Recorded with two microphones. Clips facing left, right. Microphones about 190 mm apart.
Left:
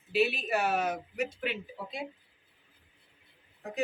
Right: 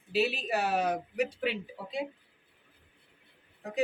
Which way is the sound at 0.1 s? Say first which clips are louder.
Left 1 dB; 35° right (ahead or behind).